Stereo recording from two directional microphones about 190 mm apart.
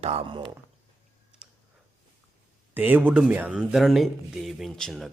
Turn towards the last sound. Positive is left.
turn(degrees=0)  # may be behind; listen again after turning